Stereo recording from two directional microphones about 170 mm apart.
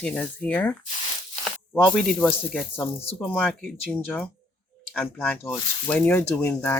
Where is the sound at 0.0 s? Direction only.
10° left (ahead or behind).